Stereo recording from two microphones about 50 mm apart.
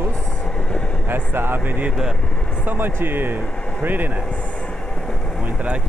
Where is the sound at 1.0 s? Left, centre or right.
Right.